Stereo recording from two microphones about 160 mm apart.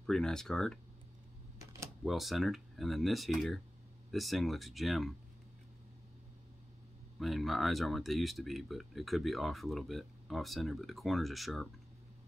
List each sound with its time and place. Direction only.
0.0 s speech: 5° left (ahead or behind)
1.6 s a sound: 20° right (ahead or behind)
2.0 s speech: centre (ahead or behind)
7.2 s speech: centre (ahead or behind)